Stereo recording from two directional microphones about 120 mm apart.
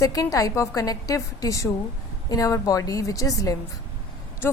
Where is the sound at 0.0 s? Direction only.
30° left (ahead or behind).